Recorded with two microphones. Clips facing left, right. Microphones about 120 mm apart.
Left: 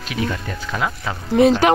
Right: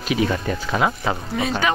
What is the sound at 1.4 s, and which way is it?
Speech, 65° left (ahead or behind).